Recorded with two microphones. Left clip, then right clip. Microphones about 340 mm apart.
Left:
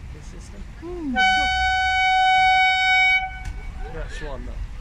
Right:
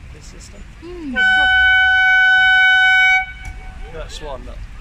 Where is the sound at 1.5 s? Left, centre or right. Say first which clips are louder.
Right 8 dB; left.